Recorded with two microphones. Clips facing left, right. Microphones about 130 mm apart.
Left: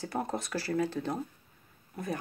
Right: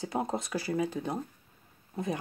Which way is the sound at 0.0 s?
20° right (ahead or behind).